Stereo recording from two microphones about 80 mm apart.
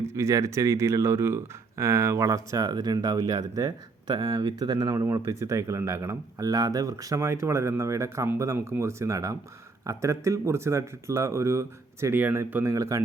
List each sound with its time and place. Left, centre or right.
0.0 s speech: right
2.6 s speech: right
5.1 s speech: right
12.1 s speech: right
12.6 s speech: right